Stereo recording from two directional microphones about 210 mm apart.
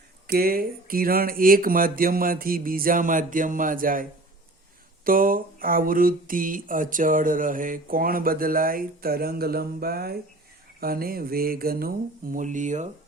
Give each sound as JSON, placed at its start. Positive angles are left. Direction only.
{"t": 0.3, "sound": "speech", "side_deg": -45}
{"t": 5.0, "sound": "speech", "side_deg": -40}